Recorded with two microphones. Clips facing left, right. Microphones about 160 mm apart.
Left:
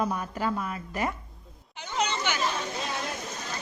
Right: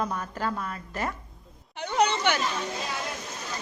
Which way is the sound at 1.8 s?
65° right (ahead or behind).